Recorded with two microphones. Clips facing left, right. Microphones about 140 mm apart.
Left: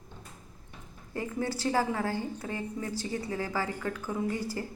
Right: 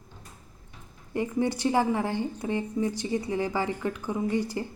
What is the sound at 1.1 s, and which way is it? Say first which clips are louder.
A woman's voice: right 6 dB; 20° right (ahead or behind).